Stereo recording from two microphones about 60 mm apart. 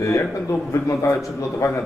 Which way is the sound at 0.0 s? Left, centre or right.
Left.